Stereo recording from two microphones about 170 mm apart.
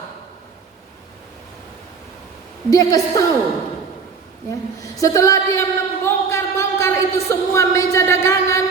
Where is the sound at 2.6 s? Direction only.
20° left (ahead or behind).